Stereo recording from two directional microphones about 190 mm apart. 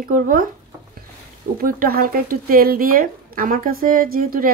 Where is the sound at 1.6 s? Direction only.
50° right (ahead or behind).